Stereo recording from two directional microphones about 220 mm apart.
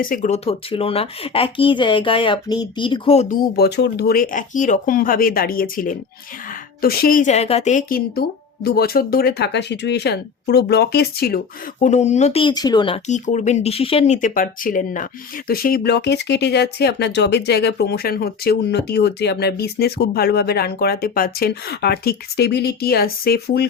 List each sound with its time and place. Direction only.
0.0 s speech: 40° left (ahead or behind)
3.5 s speech: 45° left (ahead or behind)
11.8 s speech: 30° left (ahead or behind)